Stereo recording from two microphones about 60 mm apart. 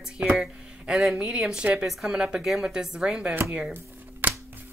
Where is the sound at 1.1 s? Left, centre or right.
Centre.